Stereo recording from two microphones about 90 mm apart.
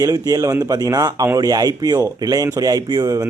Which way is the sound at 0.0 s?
40° right (ahead or behind).